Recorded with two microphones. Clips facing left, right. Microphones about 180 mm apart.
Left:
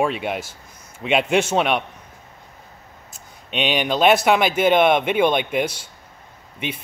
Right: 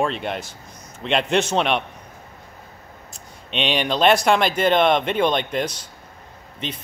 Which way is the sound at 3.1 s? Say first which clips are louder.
Left 1 dB; 5° left (ahead or behind).